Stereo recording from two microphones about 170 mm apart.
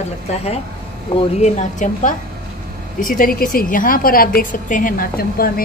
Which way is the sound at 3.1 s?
55° left (ahead or behind).